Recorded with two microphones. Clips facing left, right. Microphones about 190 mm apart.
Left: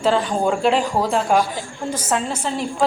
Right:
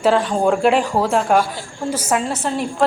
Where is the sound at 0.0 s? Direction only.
Centre (ahead or behind).